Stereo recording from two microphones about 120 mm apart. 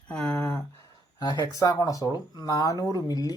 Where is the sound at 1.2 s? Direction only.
30° left (ahead or behind).